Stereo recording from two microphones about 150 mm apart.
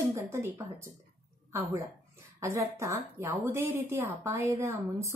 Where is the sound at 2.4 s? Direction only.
20° right (ahead or behind).